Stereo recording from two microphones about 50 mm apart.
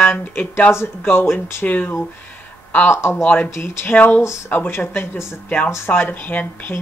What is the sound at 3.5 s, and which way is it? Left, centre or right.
Speech, left.